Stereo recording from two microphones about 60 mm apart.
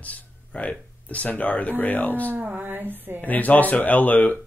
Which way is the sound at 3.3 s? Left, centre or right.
Left.